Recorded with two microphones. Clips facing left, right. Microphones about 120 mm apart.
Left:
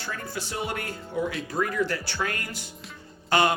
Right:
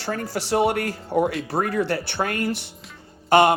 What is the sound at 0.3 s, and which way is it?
Speech, 80° right.